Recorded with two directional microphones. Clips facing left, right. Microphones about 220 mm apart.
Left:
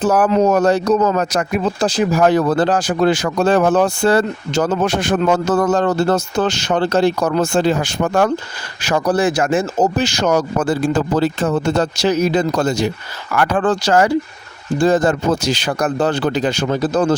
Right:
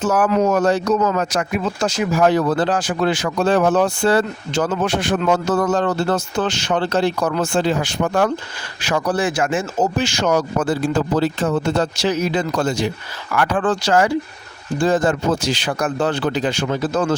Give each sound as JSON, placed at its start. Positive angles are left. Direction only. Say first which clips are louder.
{"t": 0.0, "sound": "speech", "louder": "left 3 dB", "side_deg": 35}
{"t": 2.2, "sound": "speech", "louder": "left 1 dB", "side_deg": 45}